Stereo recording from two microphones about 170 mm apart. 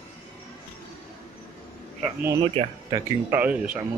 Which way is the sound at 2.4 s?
30° right (ahead or behind).